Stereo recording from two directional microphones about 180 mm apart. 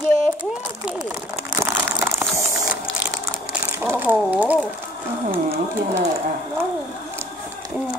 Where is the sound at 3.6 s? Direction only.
15° right (ahead or behind).